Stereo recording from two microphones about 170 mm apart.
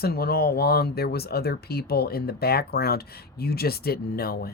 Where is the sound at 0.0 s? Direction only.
65° left (ahead or behind).